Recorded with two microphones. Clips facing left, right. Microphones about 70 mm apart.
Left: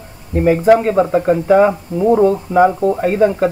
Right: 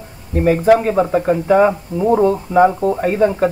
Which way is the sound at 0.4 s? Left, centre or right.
Centre.